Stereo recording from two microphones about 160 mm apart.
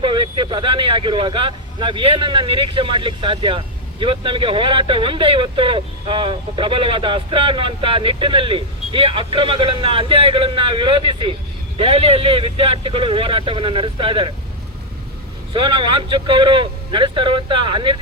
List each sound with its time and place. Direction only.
0.0 s speech: 30° right (ahead or behind)
15.5 s speech: 30° right (ahead or behind)